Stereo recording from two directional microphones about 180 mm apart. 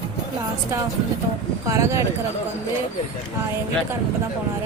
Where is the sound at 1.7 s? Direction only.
15° right (ahead or behind).